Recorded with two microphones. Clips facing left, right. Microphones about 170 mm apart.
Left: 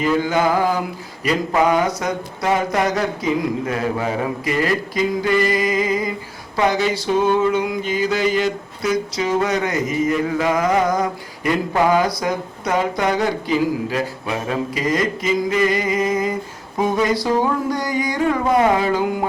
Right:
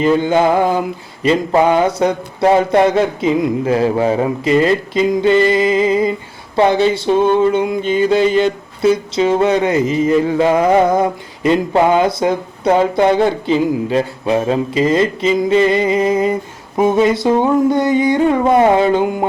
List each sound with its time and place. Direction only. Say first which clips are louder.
0.0 s music: right 5 dB; 25° right (ahead or behind)